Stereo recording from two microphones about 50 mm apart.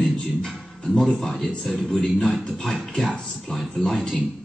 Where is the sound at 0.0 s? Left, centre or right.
Centre.